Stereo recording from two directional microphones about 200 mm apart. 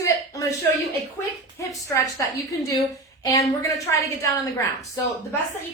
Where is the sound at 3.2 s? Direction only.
15° left (ahead or behind).